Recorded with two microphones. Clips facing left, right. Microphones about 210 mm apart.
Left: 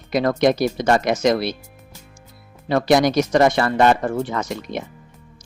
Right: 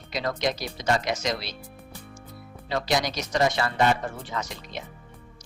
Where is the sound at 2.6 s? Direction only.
55° left (ahead or behind).